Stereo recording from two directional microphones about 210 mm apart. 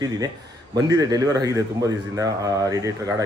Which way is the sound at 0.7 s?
15° right (ahead or behind).